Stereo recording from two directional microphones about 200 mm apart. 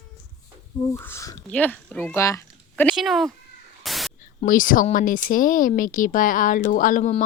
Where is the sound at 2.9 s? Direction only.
Centre (ahead or behind).